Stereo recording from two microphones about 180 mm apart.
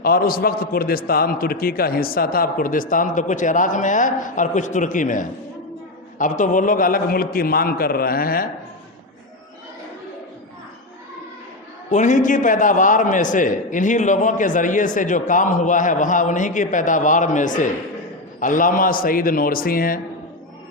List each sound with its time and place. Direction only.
0.0 s a man's voice: 55° left (ahead or behind)
11.9 s a man's voice: 45° left (ahead or behind)